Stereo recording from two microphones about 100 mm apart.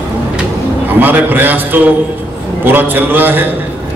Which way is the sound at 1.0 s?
20° right (ahead or behind).